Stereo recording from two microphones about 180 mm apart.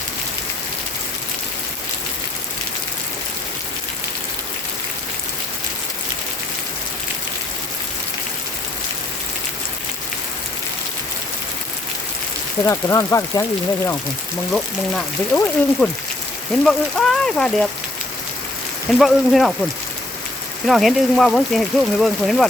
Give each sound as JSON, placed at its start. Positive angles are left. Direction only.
{"t": 12.6, "sound": "speech", "side_deg": 15}
{"t": 14.5, "sound": "speech", "side_deg": 5}
{"t": 18.9, "sound": "speech", "side_deg": 0}
{"t": 20.7, "sound": "speech", "side_deg": 0}